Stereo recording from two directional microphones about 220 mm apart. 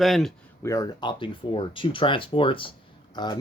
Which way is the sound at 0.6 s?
15° left (ahead or behind).